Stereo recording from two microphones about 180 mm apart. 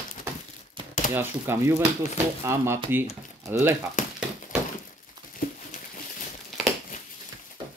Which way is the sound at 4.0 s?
45° left (ahead or behind).